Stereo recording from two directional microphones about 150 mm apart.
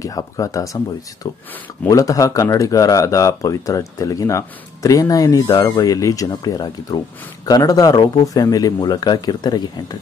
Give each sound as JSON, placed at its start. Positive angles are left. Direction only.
{"t": 0.0, "sound": "speech", "side_deg": 25}